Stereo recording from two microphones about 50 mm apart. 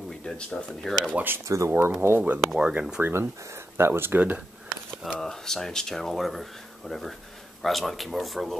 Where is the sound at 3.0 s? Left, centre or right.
Right.